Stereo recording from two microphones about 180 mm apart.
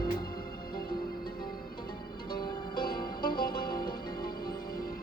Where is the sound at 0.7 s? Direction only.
55° left (ahead or behind).